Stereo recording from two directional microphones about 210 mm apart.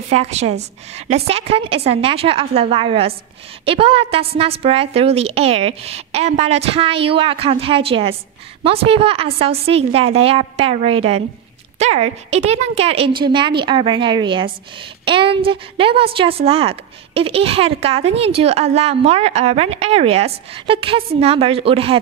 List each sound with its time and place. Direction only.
0.1 s a woman's voice: 30° right (ahead or behind)